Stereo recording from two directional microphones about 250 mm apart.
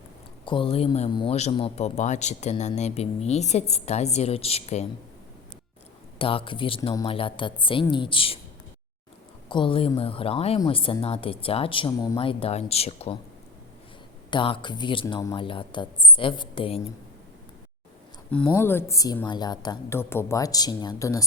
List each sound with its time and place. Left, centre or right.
0.4 s speech: left
6.1 s speech: left
9.5 s speech: centre
14.3 s speech: centre
18.3 s a woman's voice: centre